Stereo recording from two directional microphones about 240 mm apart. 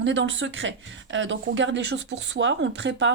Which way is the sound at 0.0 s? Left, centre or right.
Right.